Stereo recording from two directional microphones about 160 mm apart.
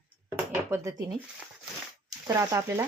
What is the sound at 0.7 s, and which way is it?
Speech, 20° right (ahead or behind).